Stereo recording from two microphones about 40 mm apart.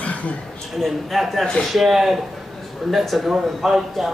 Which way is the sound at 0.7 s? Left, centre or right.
Centre.